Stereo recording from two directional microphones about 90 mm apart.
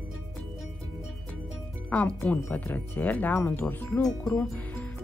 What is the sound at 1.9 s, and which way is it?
Speech, 15° left (ahead or behind).